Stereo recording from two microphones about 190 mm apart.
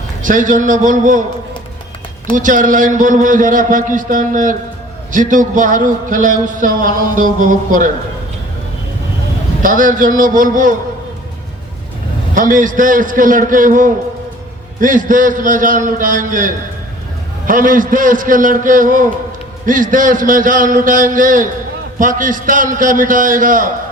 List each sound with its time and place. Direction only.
0.2 s a man's voice: 45° right (ahead or behind)
2.3 s a man's voice: 45° right (ahead or behind)
9.6 s a man's voice: 45° right (ahead or behind)
12.3 s a man's voice: 45° right (ahead or behind)